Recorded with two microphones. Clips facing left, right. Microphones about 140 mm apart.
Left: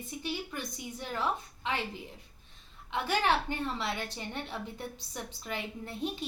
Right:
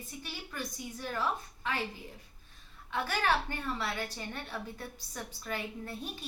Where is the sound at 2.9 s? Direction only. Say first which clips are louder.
Left 2 dB; 20° left (ahead or behind).